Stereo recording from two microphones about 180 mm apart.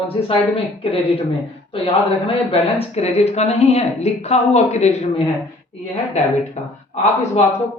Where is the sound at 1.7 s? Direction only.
30° left (ahead or behind).